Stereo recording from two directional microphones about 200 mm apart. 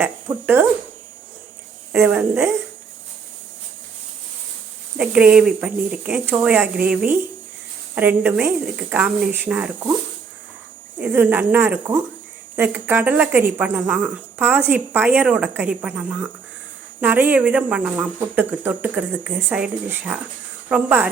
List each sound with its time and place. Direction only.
0.0 s a woman's voice: 10° right (ahead or behind)
1.9 s a woman's voice: 10° right (ahead or behind)
4.9 s a woman's voice: 5° right (ahead or behind)
11.0 s a woman's voice: 10° right (ahead or behind)